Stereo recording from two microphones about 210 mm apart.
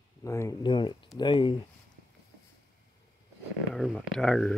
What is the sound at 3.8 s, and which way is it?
Speech, centre (ahead or behind).